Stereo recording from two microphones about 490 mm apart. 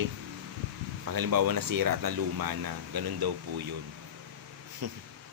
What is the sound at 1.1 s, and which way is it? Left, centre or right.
Speech, right.